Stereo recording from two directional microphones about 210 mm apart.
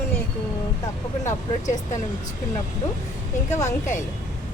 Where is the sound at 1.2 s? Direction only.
35° left (ahead or behind).